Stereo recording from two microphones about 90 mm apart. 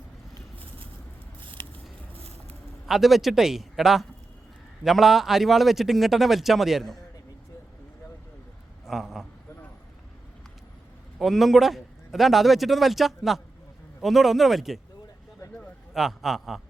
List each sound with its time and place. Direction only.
1.5 s scissors: 70° right (ahead or behind)
2.8 s a man's voice: centre (ahead or behind)
8.9 s a man's voice: centre (ahead or behind)
11.2 s a man's voice: centre (ahead or behind)
16.0 s a man's voice: 5° right (ahead or behind)